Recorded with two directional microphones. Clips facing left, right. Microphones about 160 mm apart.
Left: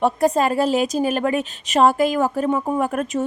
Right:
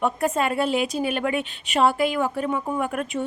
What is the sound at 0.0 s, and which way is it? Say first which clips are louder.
A woman's voice: left 5 dB; 35° left (ahead or behind).